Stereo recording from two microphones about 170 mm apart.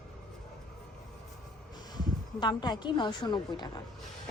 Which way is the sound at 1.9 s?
25° left (ahead or behind).